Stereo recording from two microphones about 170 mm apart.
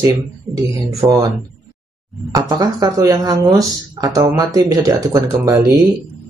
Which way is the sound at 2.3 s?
20° right (ahead or behind).